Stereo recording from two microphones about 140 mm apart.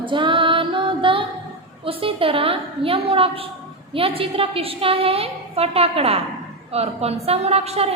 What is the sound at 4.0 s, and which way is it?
A woman's voice, 40° right (ahead or behind).